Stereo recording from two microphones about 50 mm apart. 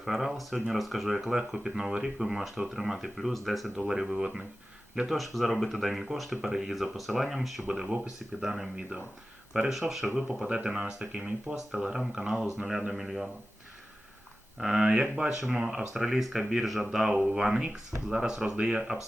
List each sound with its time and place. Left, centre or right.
0.0 s speech: centre
5.0 s speech: centre
7.7 s speech: centre
10.5 s speech: centre
14.6 s speech: centre